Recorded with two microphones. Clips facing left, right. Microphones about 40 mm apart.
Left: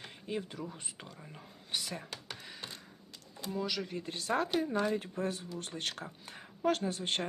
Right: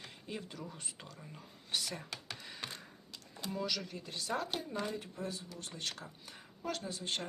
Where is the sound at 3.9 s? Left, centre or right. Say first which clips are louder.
Left 5 dB; left.